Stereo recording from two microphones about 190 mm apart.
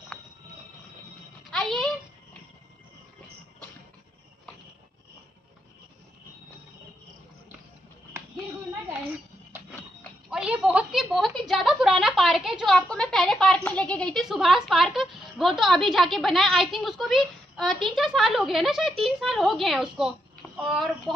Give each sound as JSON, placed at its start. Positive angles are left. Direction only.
{"t": 1.5, "sound": "music", "side_deg": 0}
{"t": 9.1, "sound": "a sound", "side_deg": -10}
{"t": 10.0, "sound": "a woman's voice", "side_deg": -5}